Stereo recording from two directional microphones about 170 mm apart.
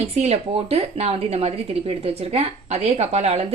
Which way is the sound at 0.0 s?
40° right (ahead or behind).